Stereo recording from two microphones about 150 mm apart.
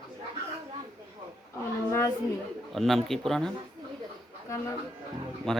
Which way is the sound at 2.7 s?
Centre (ahead or behind).